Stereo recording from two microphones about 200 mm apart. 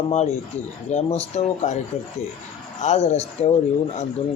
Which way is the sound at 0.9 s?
35° left (ahead or behind).